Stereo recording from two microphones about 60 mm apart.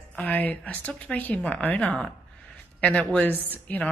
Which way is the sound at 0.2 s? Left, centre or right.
Left.